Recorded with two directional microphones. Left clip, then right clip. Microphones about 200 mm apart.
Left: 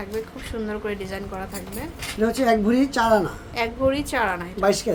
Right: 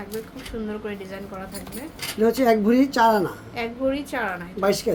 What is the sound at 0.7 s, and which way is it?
Speech, 25° left (ahead or behind).